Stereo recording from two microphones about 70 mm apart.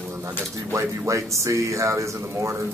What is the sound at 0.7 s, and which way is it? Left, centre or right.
Speech, right.